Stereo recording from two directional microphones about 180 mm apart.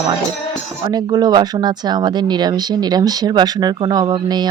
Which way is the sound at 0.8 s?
20° right (ahead or behind).